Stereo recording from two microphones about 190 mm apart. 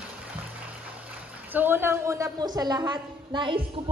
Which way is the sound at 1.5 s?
10° right (ahead or behind).